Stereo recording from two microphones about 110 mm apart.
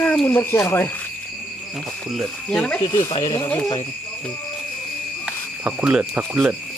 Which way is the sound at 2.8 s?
45° left (ahead or behind).